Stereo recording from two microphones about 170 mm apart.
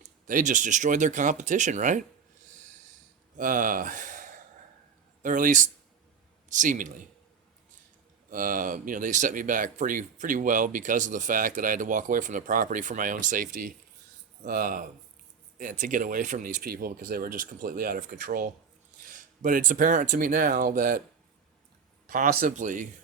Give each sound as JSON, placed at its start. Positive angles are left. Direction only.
{"t": 0.3, "sound": "speech", "side_deg": -50}
{"t": 3.3, "sound": "speech", "side_deg": -50}
{"t": 8.3, "sound": "speech", "side_deg": -55}
{"t": 22.0, "sound": "speech", "side_deg": -55}